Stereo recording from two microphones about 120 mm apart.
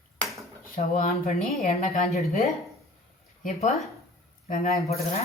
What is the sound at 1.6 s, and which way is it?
Speech, 80° left.